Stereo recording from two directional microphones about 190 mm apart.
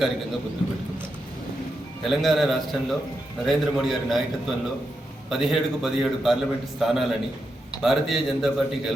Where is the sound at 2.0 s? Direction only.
Centre (ahead or behind).